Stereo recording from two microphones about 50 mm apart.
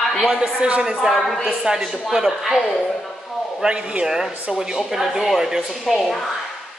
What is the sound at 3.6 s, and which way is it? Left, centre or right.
Speech, right.